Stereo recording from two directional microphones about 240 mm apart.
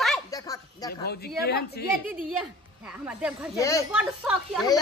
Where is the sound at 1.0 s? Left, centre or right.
Left.